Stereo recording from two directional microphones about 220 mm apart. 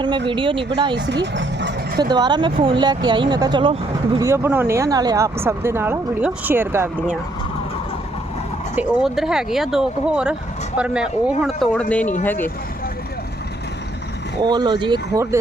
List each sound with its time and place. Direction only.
0.3 s speech: 20° right (ahead or behind)
0.9 s speech: 50° right (ahead or behind)
2.0 s speech: 20° right (ahead or behind)
4.3 s speech: 10° right (ahead or behind)
8.7 s speech: 5° right (ahead or behind)
14.5 s speech: 20° right (ahead or behind)